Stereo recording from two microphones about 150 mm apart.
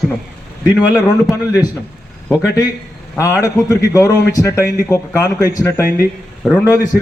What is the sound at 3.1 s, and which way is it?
A man's voice, 20° left (ahead or behind).